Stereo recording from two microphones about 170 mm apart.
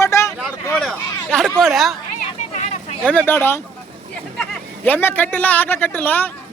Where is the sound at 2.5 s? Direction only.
45° left (ahead or behind).